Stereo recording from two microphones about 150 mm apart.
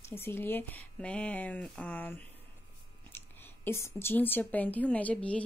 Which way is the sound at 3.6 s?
15° left (ahead or behind).